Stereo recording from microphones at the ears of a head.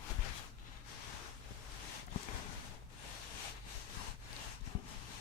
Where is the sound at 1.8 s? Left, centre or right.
Left.